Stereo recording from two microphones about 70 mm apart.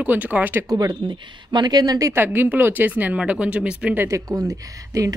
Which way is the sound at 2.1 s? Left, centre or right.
Right.